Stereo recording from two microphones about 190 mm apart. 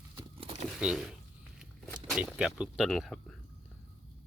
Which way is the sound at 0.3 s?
30° right (ahead or behind).